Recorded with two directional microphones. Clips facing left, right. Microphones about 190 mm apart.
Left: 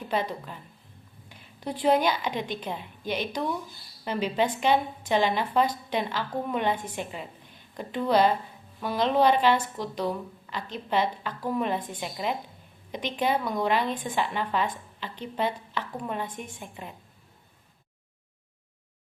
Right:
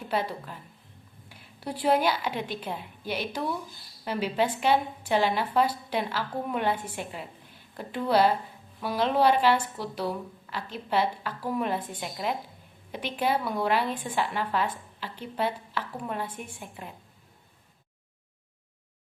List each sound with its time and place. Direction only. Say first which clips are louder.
0.1 s a woman's voice: even; 10° right (ahead or behind)